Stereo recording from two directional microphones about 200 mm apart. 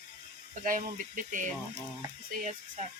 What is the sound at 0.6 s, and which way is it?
Speech, 40° right (ahead or behind).